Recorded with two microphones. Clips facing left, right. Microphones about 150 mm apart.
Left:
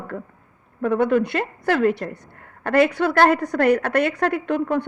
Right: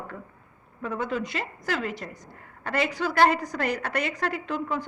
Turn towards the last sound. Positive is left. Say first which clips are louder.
# left 8 dB
turn(degrees=60)  # may be behind; listen again after turning